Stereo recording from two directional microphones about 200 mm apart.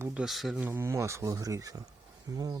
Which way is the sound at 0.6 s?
15° right (ahead or behind).